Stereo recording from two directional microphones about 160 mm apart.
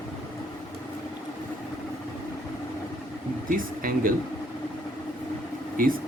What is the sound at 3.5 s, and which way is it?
Speech, 60° right (ahead or behind).